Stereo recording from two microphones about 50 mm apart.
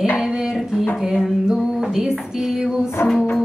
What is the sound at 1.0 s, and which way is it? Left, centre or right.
Music, centre.